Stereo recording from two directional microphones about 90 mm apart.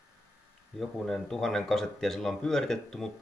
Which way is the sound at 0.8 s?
5° left (ahead or behind).